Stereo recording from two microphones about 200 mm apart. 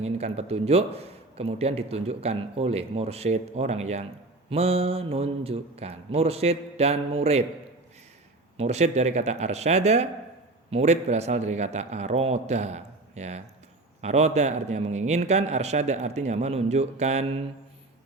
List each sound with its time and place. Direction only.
0.0 s a man's voice: 30° right (ahead or behind)
8.5 s a man's voice: 35° right (ahead or behind)